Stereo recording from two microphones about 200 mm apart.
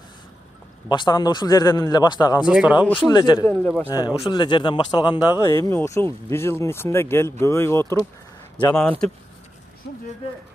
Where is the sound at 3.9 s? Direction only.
20° left (ahead or behind); by 9.0 s 5° left (ahead or behind).